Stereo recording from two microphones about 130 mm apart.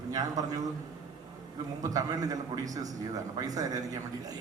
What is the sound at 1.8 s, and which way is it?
A man's voice, 30° right (ahead or behind).